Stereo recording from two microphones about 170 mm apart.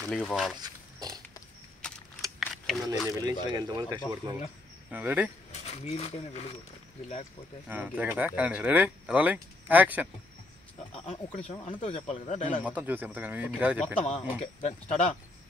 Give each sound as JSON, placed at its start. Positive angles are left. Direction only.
{"t": 0.0, "sound": "speech", "side_deg": 5}
{"t": 0.6, "sound": "a sound", "side_deg": -25}
{"t": 2.4, "sound": "keys jangling", "side_deg": 0}
{"t": 3.1, "sound": "speech", "side_deg": -20}
{"t": 4.9, "sound": "speech", "side_deg": -10}
{"t": 5.5, "sound": "speech", "side_deg": 40}
{"t": 7.6, "sound": "speech", "side_deg": -10}
{"t": 10.9, "sound": "speech", "side_deg": 40}
{"t": 12.6, "sound": "speech", "side_deg": -10}
{"t": 14.0, "sound": "speech", "side_deg": 40}